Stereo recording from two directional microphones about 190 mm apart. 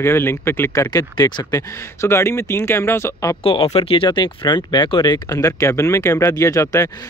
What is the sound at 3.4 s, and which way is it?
Speech, 30° left (ahead or behind).